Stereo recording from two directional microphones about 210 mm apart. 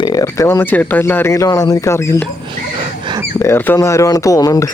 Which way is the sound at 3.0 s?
20° right (ahead or behind).